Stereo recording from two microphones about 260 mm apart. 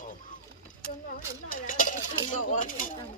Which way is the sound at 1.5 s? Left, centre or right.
Left.